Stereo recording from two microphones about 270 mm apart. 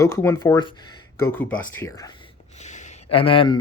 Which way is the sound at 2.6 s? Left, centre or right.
Left.